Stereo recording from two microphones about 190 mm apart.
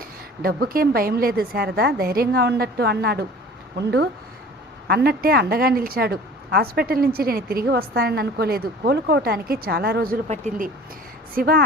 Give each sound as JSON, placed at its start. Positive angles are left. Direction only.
{"t": 0.0, "sound": "a woman's voice", "side_deg": -50}
{"t": 10.3, "sound": "speech", "side_deg": -35}
{"t": 11.3, "sound": "a woman's voice", "side_deg": -50}